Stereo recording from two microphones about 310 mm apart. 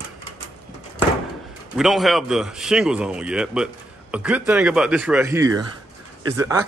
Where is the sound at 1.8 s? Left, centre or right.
Centre.